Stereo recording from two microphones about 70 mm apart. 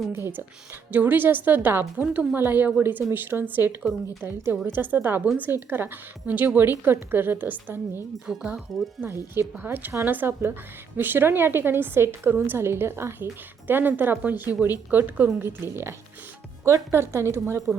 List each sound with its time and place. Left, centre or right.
0.1 s a woman's voice: right
3.1 s a woman's voice: right
8.3 s speech: centre
9.0 s a woman's voice: right